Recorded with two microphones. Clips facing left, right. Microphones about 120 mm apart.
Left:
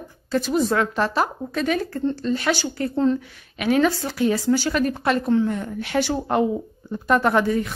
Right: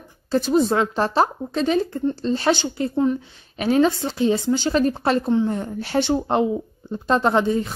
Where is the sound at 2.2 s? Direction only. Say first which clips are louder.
Right 2 dB; 30° right (ahead or behind).